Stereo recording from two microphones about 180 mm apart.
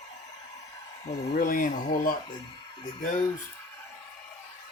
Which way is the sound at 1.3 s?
50° left (ahead or behind).